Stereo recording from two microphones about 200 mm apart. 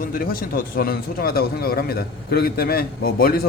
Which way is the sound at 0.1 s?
45° left (ahead or behind).